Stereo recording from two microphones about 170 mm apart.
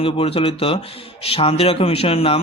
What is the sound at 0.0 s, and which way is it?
A man's voice, 35° left (ahead or behind).